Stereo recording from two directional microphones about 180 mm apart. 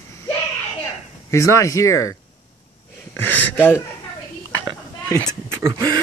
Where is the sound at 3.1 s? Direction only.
10° left (ahead or behind).